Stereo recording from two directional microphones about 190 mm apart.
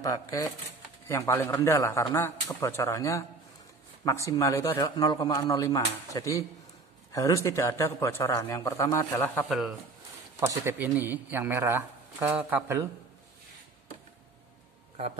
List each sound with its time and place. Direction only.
0.0 s speech: 15° left (ahead or behind)
10.4 s speech: 15° right (ahead or behind)